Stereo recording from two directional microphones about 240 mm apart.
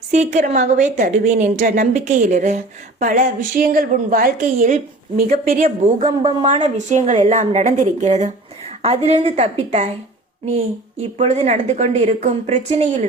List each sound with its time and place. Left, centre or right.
0.1 s a woman's voice: right
6.0 s a woman's voice: centre
11.2 s a woman's voice: right